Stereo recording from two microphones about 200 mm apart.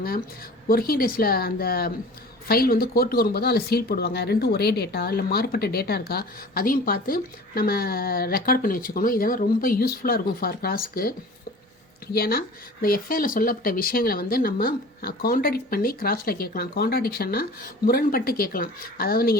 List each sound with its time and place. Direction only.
0.7 s speech: 45° left (ahead or behind)
12.1 s speech: 50° left (ahead or behind)